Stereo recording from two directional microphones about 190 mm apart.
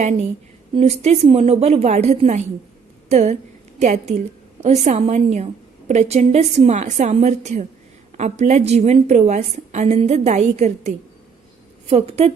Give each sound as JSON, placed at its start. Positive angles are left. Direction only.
{"t": 0.0, "sound": "a woman's voice", "side_deg": -40}